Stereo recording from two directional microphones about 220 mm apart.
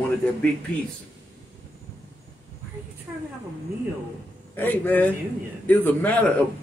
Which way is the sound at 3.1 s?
5° right (ahead or behind).